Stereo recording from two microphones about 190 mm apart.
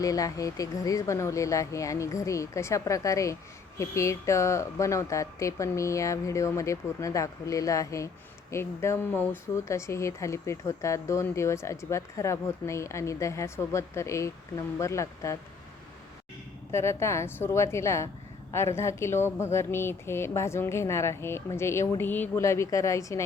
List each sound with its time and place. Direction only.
0.0 s speech: 20° left (ahead or behind)
16.7 s speech: 15° left (ahead or behind)